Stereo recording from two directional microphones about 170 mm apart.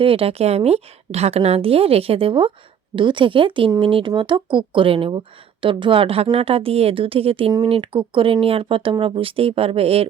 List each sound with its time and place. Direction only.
0.0 s a woman's voice: 35° right (ahead or behind)